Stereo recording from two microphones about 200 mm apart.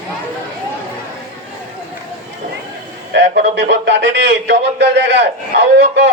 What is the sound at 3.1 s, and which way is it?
Speech, 60° right (ahead or behind).